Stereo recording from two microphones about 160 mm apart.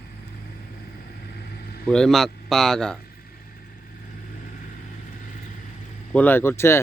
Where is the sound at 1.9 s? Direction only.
5° left (ahead or behind).